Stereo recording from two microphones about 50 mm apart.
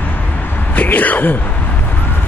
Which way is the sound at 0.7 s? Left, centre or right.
Left.